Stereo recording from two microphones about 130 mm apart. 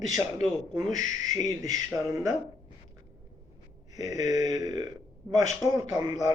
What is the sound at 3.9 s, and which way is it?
A man's voice, 30° right (ahead or behind).